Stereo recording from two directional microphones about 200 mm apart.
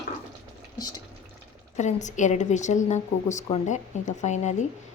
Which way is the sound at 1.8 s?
35° left (ahead or behind).